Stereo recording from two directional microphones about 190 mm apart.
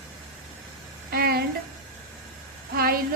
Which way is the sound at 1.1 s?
50° right (ahead or behind).